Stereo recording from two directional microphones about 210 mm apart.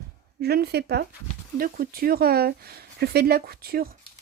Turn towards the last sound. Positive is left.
turn(degrees=-45)  # may be behind; listen again after turning